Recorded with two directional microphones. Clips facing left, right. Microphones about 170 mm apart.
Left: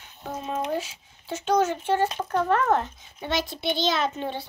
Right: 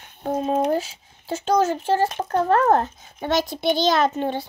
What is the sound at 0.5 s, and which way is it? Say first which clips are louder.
A child's voice: right 5 dB; 40° right (ahead or behind).